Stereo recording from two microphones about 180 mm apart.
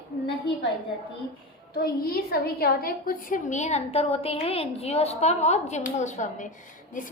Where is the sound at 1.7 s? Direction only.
55° left (ahead or behind); by 6.5 s 40° left (ahead or behind).